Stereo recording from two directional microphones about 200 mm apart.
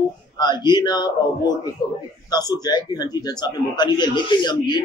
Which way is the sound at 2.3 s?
20° left (ahead or behind).